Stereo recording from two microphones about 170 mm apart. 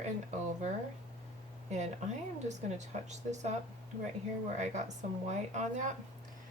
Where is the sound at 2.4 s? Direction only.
45° right (ahead or behind).